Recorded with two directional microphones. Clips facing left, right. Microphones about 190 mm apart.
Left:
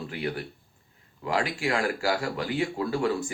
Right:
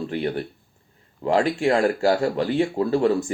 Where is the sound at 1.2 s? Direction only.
35° right (ahead or behind).